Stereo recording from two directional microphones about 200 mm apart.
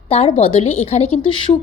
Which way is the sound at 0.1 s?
30° left (ahead or behind).